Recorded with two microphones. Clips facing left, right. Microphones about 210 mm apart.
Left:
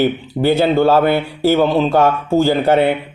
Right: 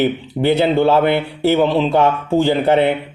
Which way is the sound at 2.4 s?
25° right (ahead or behind).